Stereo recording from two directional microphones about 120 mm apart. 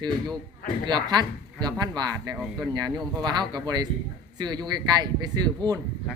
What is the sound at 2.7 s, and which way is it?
Speech, 35° right (ahead or behind).